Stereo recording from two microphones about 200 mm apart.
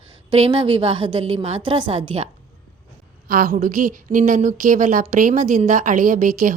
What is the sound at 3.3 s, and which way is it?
A woman's voice, 45° right (ahead or behind).